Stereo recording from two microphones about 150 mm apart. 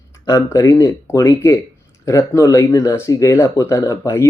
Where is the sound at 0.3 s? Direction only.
20° left (ahead or behind).